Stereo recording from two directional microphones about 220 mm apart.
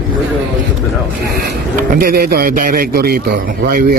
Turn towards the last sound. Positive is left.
turn(degrees=-40)  # may be behind; listen again after turning